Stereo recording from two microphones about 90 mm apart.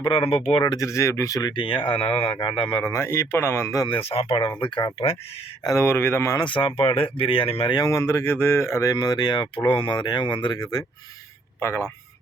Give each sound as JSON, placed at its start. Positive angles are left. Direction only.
{"t": 0.0, "sound": "speech", "side_deg": 75}
{"t": 0.8, "sound": "speech", "side_deg": 35}
{"t": 1.4, "sound": "speech", "side_deg": 60}
{"t": 2.8, "sound": "speech", "side_deg": 30}
{"t": 3.8, "sound": "speech", "side_deg": 85}
{"t": 5.6, "sound": "speech", "side_deg": 30}
{"t": 6.4, "sound": "speech", "side_deg": 65}
{"t": 7.7, "sound": "speech", "side_deg": 45}
{"t": 7.9, "sound": "speech", "side_deg": 30}
{"t": 11.6, "sound": "speech", "side_deg": 30}